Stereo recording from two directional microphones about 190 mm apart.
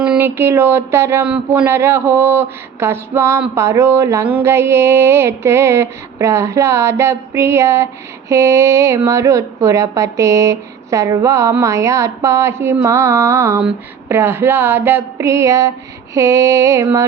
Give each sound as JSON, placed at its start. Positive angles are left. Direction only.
{"t": 0.0, "sound": "speech", "side_deg": -10}